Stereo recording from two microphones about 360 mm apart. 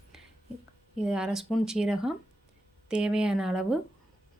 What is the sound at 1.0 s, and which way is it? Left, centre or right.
Speech, centre.